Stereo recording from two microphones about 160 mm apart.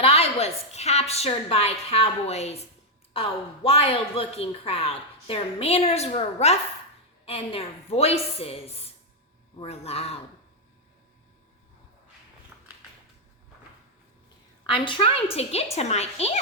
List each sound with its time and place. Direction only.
0.0 s a woman's voice: 40° left (ahead or behind)
12.5 s a sound: 15° right (ahead or behind)
14.7 s a woman's voice: 30° left (ahead or behind)